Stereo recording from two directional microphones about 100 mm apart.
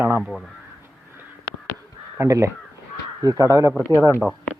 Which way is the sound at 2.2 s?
30° right (ahead or behind).